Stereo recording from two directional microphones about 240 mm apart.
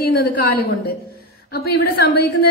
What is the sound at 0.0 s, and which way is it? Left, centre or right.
A woman's voice, left.